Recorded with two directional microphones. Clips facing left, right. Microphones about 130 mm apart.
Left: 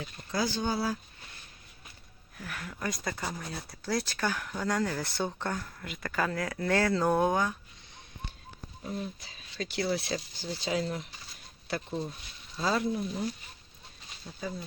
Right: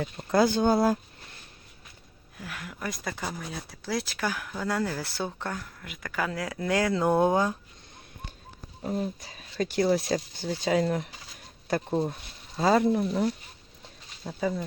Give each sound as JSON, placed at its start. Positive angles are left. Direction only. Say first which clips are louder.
{"t": 0.3, "sound": "speech", "louder": "right 9 dB", "side_deg": -55}
{"t": 2.4, "sound": "speech", "louder": "even", "side_deg": -10}
{"t": 8.8, "sound": "speech", "louder": "right 6 dB", "side_deg": -45}
{"t": 14.3, "sound": "speech", "louder": "right 9 dB", "side_deg": -75}